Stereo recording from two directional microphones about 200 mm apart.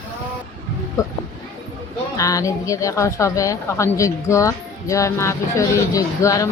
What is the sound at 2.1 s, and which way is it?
A woman's voice, 15° left (ahead or behind).